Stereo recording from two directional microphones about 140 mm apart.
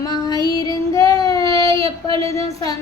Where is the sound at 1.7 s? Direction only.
40° right (ahead or behind).